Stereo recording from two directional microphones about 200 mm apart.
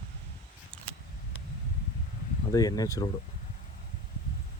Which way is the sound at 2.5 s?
20° left (ahead or behind).